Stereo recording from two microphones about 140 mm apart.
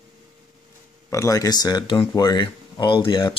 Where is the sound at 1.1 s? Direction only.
25° left (ahead or behind).